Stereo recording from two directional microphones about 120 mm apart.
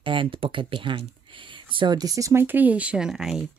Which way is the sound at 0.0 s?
45° right (ahead or behind).